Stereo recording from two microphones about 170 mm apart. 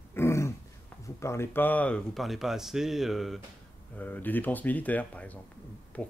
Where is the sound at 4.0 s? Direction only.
10° left (ahead or behind).